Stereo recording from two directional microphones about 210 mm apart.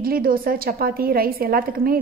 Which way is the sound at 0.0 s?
45° right (ahead or behind).